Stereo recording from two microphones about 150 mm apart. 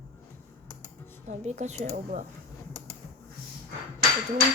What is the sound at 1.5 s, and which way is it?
Speech, 50° right (ahead or behind).